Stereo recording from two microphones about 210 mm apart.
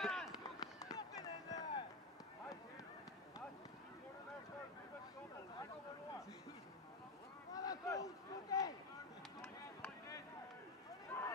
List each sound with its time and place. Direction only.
0.0 s run: centre (ahead or behind)
0.6 s fireworks: 15° left (ahead or behind)
7.5 s a sound: 15° left (ahead or behind)
9.4 s chop: 10° left (ahead or behind)
11.1 s run: 10° left (ahead or behind)